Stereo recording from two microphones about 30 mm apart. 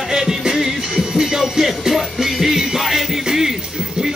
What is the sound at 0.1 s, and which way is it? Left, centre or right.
Music, centre.